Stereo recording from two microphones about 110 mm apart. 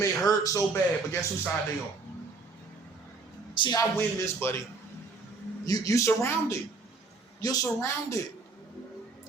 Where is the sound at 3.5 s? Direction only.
45° left (ahead or behind).